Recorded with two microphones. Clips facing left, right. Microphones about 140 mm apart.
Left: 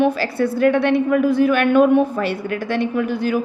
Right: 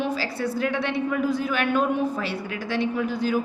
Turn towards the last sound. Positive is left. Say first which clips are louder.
# left 4 dB
turn(degrees=65)  # may be behind; listen again after turning